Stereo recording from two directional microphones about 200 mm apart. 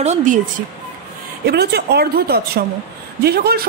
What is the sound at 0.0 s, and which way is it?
Speech, 35° right (ahead or behind).